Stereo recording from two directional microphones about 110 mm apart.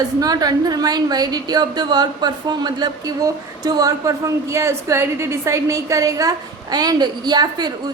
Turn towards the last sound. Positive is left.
turn(degrees=-40)  # may be behind; listen again after turning